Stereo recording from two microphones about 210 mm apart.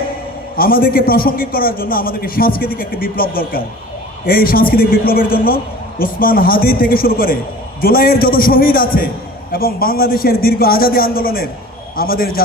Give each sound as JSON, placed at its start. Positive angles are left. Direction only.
{"t": 0.5, "sound": "a man's voice", "side_deg": 45}